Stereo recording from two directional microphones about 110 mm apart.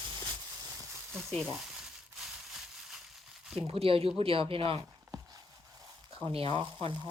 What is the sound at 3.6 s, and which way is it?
A woman's voice, 60° right (ahead or behind).